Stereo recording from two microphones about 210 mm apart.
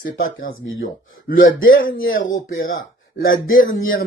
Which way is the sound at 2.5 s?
70° left (ahead or behind).